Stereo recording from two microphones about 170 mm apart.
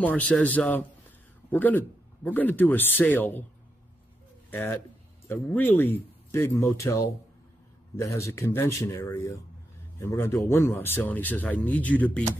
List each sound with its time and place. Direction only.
0.0 s speech: 10° left (ahead or behind)
4.5 s speech: 10° left (ahead or behind)